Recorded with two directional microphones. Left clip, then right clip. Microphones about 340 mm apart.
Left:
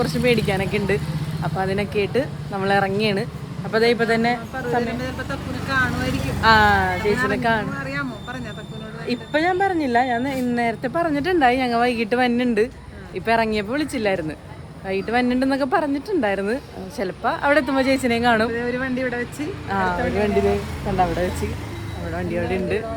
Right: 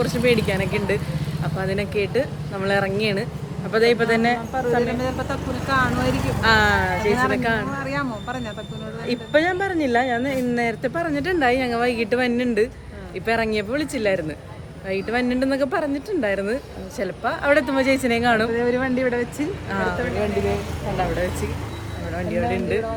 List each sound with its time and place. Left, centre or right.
0.0 s speech: centre
4.8 s speech: centre
6.4 s speech: centre
7.8 s speech: centre
9.0 s speech: centre
18.5 s speech: centre
19.7 s speech: centre
20.6 s speech: centre
22.1 s speech: centre